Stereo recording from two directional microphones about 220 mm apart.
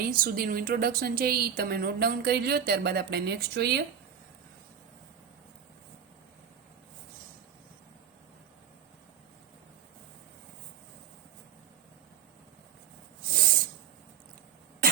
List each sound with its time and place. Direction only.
0.0 s a woman's voice: 40° right (ahead or behind)
13.2 s snake: 40° right (ahead or behind)